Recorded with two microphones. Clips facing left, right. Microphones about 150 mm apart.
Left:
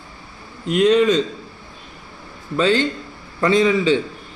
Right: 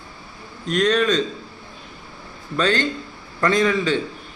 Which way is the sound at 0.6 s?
15° left (ahead or behind).